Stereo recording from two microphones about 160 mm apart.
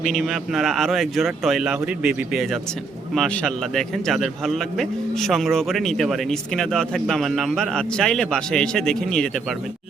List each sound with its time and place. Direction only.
0.0 s a man's voice: centre (ahead or behind)